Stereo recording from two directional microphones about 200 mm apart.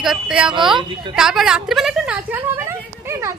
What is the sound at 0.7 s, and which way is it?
Speech, 25° right (ahead or behind).